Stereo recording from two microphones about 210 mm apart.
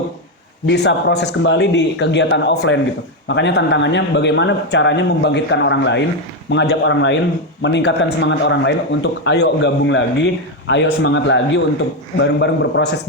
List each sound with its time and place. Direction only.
0.6 s a man's voice: 55° left (ahead or behind)